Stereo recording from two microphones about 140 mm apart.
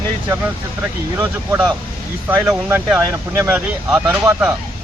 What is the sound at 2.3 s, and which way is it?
Speech, 15° right (ahead or behind).